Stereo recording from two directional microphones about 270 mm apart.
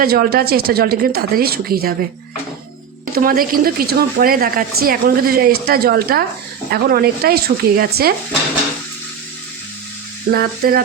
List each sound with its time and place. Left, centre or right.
0.0 s speech: right
3.2 s speech: right
10.3 s speech: right